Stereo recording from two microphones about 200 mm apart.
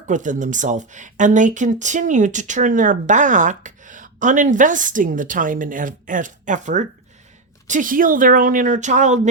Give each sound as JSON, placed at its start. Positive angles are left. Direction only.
{"t": 0.1, "sound": "speech", "side_deg": -40}